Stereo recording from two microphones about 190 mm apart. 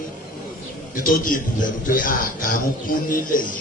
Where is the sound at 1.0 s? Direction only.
45° left (ahead or behind).